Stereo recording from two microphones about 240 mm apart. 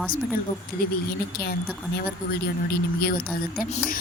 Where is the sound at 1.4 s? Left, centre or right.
Left.